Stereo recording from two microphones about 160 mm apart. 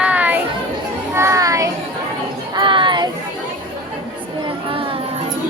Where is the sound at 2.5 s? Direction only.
30° right (ahead or behind).